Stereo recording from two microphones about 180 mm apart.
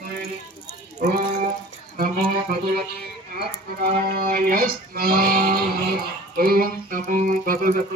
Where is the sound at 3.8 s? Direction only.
55° right (ahead or behind).